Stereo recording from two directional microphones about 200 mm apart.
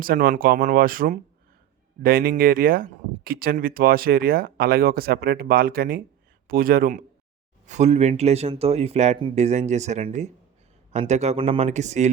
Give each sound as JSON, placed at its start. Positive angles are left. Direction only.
{"t": 0.0, "sound": "speech", "side_deg": -45}